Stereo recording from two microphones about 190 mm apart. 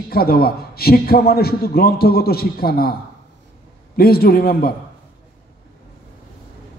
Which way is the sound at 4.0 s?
55° left (ahead or behind).